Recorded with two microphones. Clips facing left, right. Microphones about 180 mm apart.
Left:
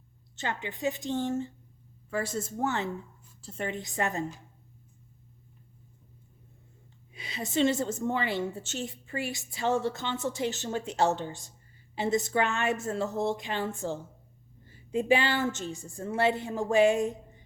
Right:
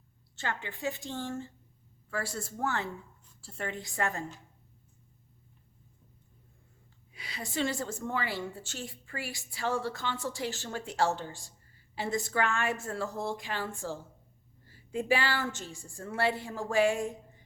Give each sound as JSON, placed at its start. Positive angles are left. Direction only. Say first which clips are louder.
{"t": 0.3, "sound": "a woman's voice", "louder": "left 3 dB", "side_deg": 20}
{"t": 7.1, "sound": "a woman's voice", "louder": "left 6 dB", "side_deg": 20}